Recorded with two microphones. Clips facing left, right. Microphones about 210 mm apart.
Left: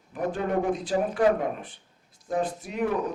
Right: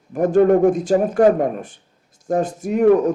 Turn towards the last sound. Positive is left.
turn(degrees=-45)  # may be behind; listen again after turning